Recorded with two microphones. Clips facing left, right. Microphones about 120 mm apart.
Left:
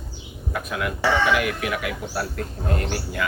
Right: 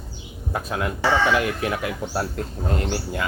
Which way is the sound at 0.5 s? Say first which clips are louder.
Right 1 dB; 30° right (ahead or behind).